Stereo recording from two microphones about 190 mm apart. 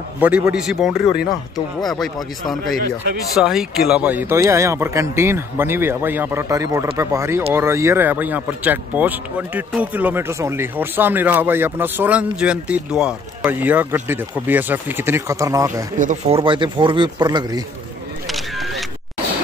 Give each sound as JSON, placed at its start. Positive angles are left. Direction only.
{"t": 0.2, "sound": "speech", "side_deg": -5}
{"t": 16.0, "sound": "speech", "side_deg": -35}
{"t": 18.3, "sound": "single-lens reflex camera", "side_deg": 0}